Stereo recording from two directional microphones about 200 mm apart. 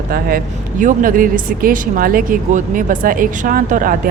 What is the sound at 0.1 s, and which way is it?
Speech, 45° right (ahead or behind).